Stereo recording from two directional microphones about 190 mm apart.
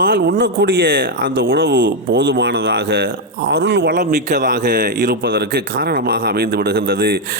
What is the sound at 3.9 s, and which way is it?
Speech, 50° right (ahead or behind).